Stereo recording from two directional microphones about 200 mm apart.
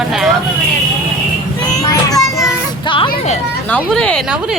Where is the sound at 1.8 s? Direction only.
20° left (ahead or behind).